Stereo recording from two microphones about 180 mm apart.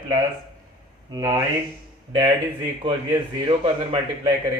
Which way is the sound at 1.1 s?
20° right (ahead or behind).